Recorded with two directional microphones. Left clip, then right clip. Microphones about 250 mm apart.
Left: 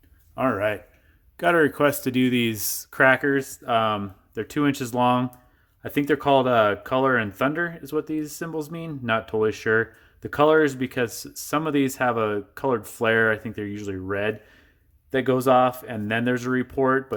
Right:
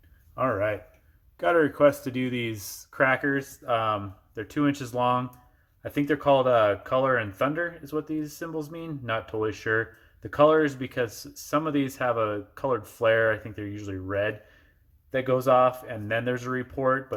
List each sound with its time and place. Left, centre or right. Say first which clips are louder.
0.3 s speech: left 2 dB; left